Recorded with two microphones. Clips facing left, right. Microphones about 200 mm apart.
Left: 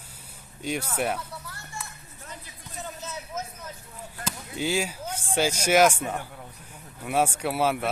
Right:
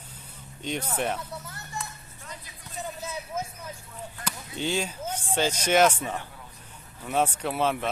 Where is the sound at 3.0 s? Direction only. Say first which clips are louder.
Right 2 dB; 10° right (ahead or behind).